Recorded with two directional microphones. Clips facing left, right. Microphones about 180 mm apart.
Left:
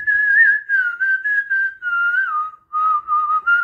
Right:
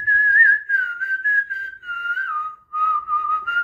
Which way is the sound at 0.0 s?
15° right (ahead or behind).